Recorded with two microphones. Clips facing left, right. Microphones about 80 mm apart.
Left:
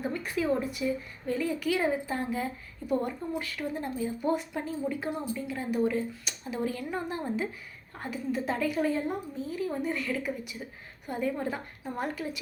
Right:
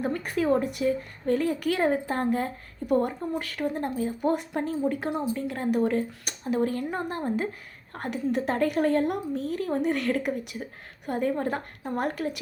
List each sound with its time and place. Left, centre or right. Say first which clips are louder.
0.0 s a woman's voice: right 4 dB; right
5.3 s a woman's voice: right 5 dB; right
7.9 s a woman's voice: right 5 dB; right